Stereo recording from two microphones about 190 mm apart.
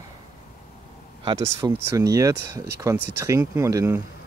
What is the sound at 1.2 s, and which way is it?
Speech, 20° right (ahead or behind).